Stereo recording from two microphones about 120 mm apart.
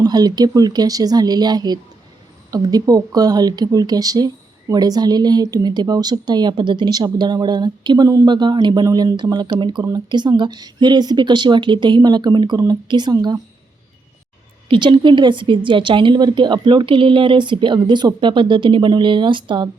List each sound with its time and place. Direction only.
0.0 s speech: 35° right (ahead or behind)
14.7 s speech: 45° right (ahead or behind)